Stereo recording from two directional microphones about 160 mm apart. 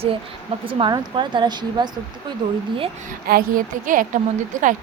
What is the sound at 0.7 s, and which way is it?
A woman's voice, 30° right (ahead or behind).